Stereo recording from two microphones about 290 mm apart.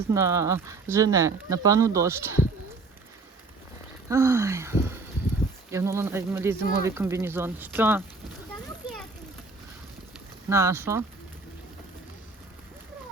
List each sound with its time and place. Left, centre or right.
0.1 s speech: centre
4.1 s speech: centre
10.5 s speech: centre